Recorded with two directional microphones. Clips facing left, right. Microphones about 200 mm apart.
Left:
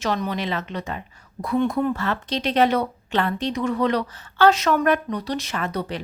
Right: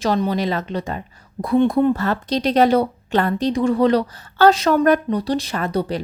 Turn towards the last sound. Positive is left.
turn(degrees=-35)  # may be behind; listen again after turning